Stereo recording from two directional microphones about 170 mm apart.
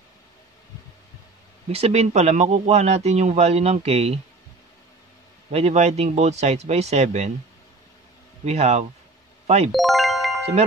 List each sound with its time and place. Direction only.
1.7 s a man's voice: 35° right (ahead or behind)
5.5 s a man's voice: 40° right (ahead or behind)
8.5 s a man's voice: 40° right (ahead or behind)
9.7 s music: centre (ahead or behind)